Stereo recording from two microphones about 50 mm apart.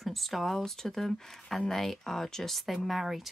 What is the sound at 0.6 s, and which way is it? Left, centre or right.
Speech, centre.